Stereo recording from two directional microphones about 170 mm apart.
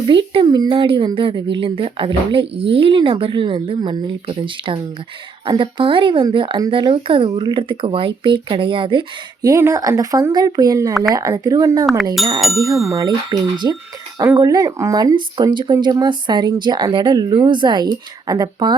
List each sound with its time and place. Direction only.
0.1 s speech: 30° right (ahead or behind)
12.4 s speech: centre (ahead or behind)
12.9 s speech: 20° right (ahead or behind)